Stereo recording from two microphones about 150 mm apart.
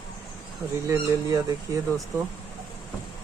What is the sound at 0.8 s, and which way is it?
Speech, 20° right (ahead or behind).